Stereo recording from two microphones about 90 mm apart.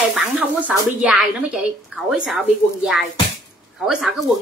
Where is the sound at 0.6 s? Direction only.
15° right (ahead or behind).